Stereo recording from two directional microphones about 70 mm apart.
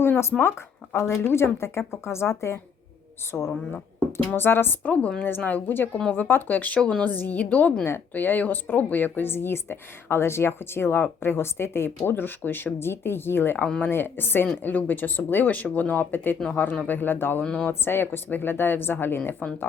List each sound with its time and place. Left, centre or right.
0.0 s speech: left
3.3 s speech: centre
4.3 s speech: left
13.7 s speech: centre
13.9 s speech: left
17.4 s speech: centre
17.7 s speech: left